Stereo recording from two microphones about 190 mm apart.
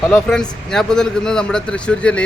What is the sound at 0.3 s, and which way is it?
Speech, centre (ahead or behind).